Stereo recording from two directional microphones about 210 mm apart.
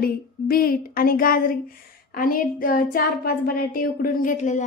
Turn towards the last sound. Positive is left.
turn(degrees=35)  # may be behind; listen again after turning